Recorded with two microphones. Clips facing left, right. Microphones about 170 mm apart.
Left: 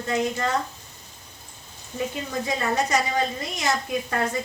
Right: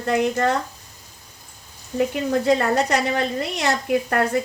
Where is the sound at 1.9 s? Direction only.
65° right (ahead or behind).